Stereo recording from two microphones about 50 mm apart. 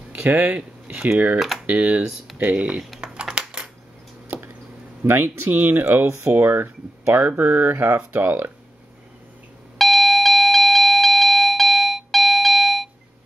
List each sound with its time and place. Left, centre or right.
0.1 s speech: right
0.6 s speech: right
2.5 s speech: right
3.0 s typing: centre
4.3 s a sound: right
5.0 s speech: right
6.0 s speech: right
9.8 s doorbell: centre